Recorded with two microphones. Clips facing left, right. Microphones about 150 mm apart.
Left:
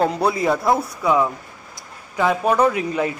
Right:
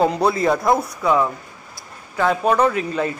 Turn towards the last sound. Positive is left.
turn(degrees=15)  # may be behind; listen again after turning